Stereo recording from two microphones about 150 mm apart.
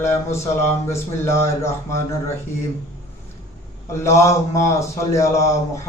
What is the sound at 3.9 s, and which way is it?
A man's voice, 20° left (ahead or behind).